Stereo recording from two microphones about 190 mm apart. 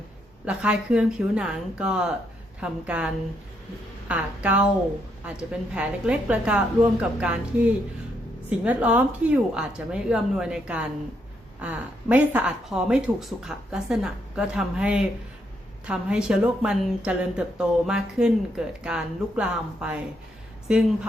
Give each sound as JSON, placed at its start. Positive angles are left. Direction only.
{"t": 0.4, "sound": "speech", "side_deg": -5}
{"t": 4.1, "sound": "a woman's voice", "side_deg": -5}